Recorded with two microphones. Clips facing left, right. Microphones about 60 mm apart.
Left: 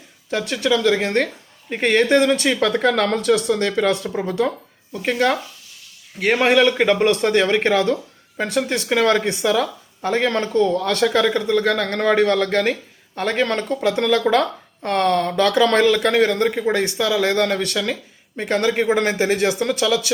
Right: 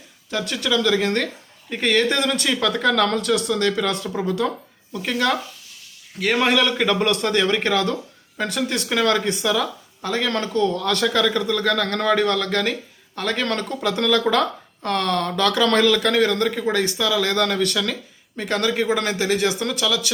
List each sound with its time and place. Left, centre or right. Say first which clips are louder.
0.3 s speech: left 3 dB; left
10.7 s speech: left 3 dB; centre